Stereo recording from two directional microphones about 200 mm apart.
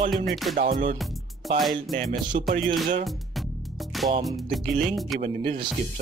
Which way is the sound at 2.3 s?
35° right (ahead or behind).